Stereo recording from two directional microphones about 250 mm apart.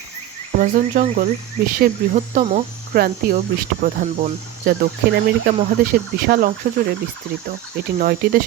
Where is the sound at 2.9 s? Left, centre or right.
Right.